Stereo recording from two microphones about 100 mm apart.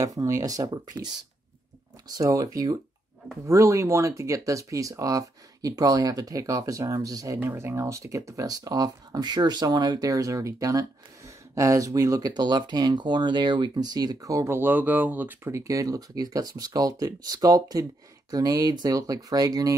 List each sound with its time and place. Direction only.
0.0 s speech: 35° right (ahead or behind)
7.3 s speech: 25° right (ahead or behind)
15.4 s speech: 30° right (ahead or behind)